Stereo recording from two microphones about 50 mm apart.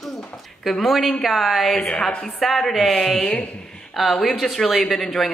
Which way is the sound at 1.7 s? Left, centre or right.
Centre.